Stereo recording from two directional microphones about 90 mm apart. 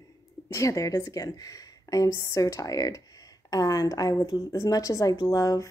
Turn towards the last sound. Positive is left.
turn(degrees=40)  # may be behind; listen again after turning